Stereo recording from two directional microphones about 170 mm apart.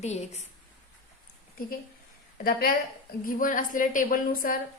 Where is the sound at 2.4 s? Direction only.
60° left (ahead or behind).